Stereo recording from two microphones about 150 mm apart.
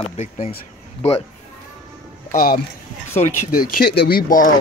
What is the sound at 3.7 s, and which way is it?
Speech, 90° left.